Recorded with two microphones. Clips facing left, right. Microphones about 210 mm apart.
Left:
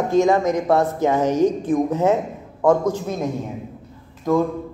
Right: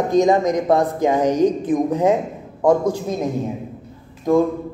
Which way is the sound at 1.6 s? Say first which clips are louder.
Right 1 dB; 15° right (ahead or behind).